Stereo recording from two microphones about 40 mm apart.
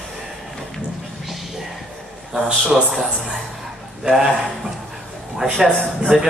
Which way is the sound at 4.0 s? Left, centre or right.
Centre.